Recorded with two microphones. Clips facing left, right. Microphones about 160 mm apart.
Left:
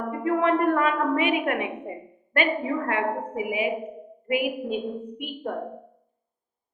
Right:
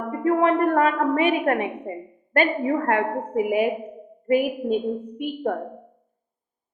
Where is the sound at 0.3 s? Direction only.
40° right (ahead or behind).